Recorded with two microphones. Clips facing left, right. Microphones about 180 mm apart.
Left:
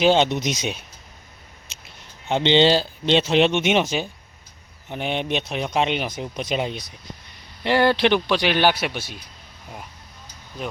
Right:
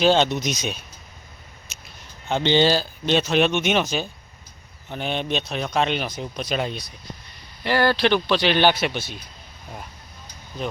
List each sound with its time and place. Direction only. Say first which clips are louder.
0.0 s speech: left 1 dB; 20° left (ahead or behind)
2.0 s a man's voice: left 2 dB; 20° left (ahead or behind)